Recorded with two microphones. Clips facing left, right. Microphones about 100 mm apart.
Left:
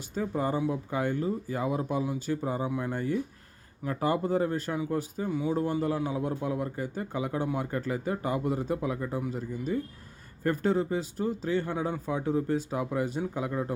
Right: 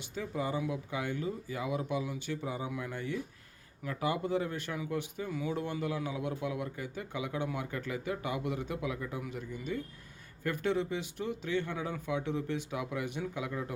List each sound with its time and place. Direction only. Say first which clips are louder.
0.1 s speech: left 6 dB; 45° left (ahead or behind)
2.6 s speech: left 7 dB; 30° left (ahead or behind)
2.9 s speech: left 7 dB; 45° left (ahead or behind)
5.3 s speech: left 6 dB; 25° left (ahead or behind)
5.8 s speech: left 6 dB; 35° left (ahead or behind)